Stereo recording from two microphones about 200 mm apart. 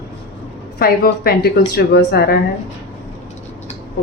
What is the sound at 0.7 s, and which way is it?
A woman's voice, 50° left (ahead or behind).